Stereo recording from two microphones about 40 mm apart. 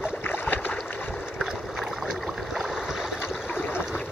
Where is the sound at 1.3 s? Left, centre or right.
Centre.